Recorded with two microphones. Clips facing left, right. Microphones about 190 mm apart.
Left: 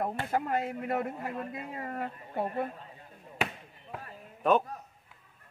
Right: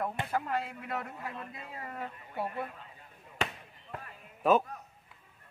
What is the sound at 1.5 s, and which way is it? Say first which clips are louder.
Speech: left 6 dB; 40° left (ahead or behind).